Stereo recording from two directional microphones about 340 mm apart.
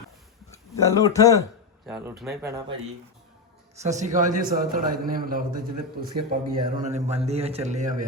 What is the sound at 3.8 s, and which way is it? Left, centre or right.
A man's voice, right.